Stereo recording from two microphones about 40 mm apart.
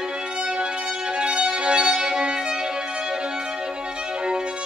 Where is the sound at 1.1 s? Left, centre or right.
Right.